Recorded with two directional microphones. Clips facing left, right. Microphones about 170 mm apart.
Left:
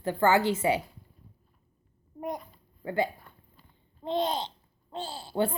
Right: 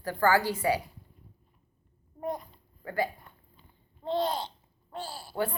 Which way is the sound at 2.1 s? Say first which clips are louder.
Right 1 dB; 15° left (ahead or behind).